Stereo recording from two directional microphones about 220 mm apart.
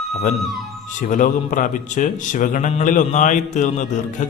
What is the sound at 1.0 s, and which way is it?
Speech, 35° left (ahead or behind).